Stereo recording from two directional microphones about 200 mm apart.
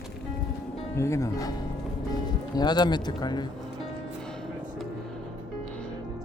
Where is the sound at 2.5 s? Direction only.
20° left (ahead or behind).